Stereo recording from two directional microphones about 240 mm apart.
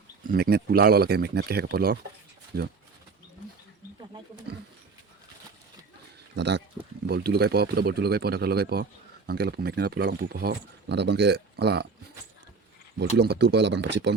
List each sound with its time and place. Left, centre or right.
0.3 s speech: right
6.3 s speech: right
13.0 s speech: right